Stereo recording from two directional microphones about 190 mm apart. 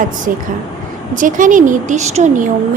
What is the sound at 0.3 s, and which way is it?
A woman's voice, 45° right (ahead or behind).